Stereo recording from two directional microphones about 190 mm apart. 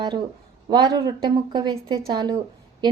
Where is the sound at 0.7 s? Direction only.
25° right (ahead or behind).